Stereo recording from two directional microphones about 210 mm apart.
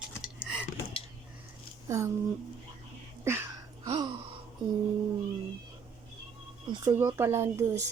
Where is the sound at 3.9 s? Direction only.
25° right (ahead or behind).